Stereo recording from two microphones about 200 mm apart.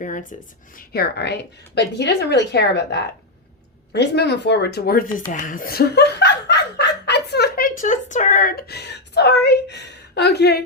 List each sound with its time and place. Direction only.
0.0 s speech: 40° left (ahead or behind)